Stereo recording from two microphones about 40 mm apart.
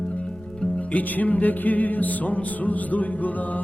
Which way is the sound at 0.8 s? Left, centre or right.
Left.